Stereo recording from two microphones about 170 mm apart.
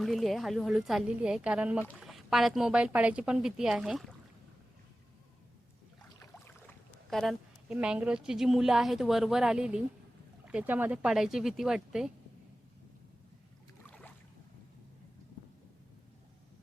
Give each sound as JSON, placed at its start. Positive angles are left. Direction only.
{"t": 0.0, "sound": "speech", "side_deg": 0}
{"t": 6.3, "sound": "speech", "side_deg": 5}
{"t": 13.8, "sound": "boat", "side_deg": 10}